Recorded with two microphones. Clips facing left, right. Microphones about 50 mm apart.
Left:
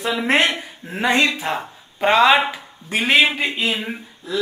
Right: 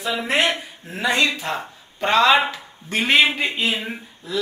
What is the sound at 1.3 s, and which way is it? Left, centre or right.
Speech, centre.